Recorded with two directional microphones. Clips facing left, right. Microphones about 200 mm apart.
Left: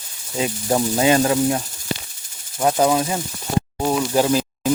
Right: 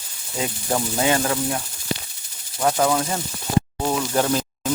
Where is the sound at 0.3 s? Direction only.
20° left (ahead or behind).